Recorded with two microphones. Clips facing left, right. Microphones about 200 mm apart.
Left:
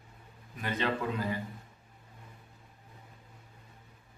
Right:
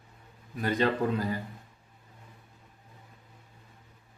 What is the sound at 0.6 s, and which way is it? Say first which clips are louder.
Speech: right 5 dB; 40° right (ahead or behind).